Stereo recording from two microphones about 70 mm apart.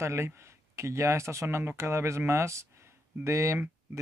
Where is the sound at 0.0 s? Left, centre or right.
Right.